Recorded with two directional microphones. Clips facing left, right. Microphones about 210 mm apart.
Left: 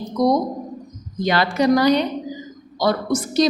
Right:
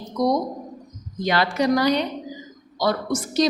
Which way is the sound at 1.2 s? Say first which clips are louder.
Left 3 dB; 35° left (ahead or behind).